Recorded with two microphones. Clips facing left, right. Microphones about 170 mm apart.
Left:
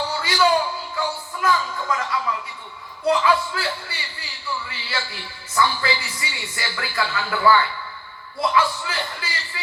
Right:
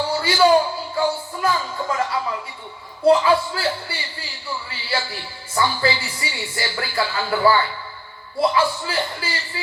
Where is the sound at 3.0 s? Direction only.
30° right (ahead or behind).